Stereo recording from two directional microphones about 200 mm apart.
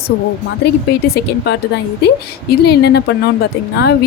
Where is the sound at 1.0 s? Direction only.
55° left (ahead or behind).